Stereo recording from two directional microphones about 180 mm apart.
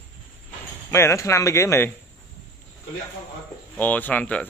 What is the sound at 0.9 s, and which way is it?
Speech, 15° left (ahead or behind).